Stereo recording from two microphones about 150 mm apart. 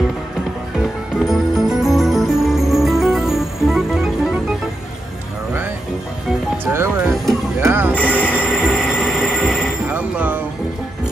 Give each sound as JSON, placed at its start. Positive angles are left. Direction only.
{"t": 1.2, "sound": "music", "side_deg": 0}
{"t": 6.6, "sound": "music", "side_deg": -15}
{"t": 7.9, "sound": "music", "side_deg": 10}
{"t": 8.5, "sound": "music", "side_deg": 0}